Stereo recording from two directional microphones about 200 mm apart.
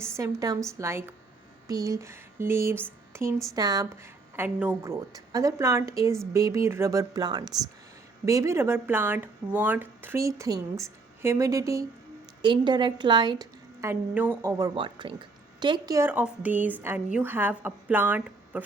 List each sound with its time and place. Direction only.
0.2 s a woman's voice: 20° right (ahead or behind)
14.1 s speech: 10° right (ahead or behind)